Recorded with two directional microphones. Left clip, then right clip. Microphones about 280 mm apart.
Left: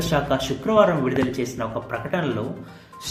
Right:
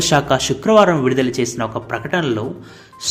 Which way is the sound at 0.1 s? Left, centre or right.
Right.